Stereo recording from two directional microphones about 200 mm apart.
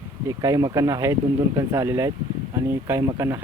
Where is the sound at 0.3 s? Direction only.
15° right (ahead or behind).